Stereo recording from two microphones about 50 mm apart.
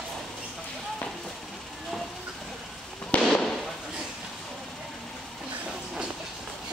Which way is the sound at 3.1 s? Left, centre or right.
Left.